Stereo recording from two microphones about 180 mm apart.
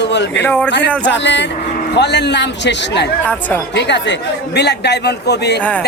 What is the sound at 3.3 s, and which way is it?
Speech, 10° left (ahead or behind).